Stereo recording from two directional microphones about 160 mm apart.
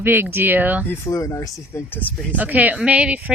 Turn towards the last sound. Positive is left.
turn(degrees=-10)  # may be behind; listen again after turning